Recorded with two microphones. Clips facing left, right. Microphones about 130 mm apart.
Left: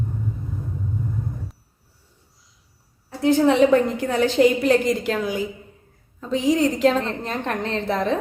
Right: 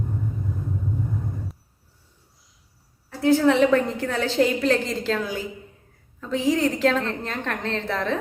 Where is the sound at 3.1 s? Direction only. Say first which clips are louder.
Left 1 dB; 20° left (ahead or behind).